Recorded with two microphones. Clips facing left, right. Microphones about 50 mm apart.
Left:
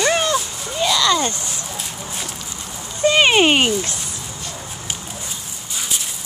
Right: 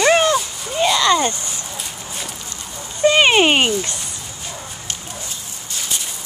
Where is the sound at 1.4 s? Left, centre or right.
Centre.